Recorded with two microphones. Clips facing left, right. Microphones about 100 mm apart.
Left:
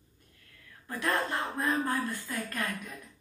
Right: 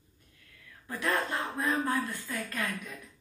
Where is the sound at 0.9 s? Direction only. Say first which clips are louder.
Even; 20° left (ahead or behind).